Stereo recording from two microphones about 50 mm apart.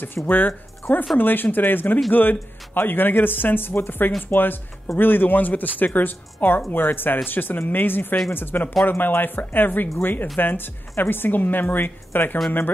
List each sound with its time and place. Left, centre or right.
0.0 s a woman's voice: left